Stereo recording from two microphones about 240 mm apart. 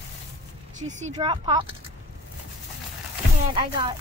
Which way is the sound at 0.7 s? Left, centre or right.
Right.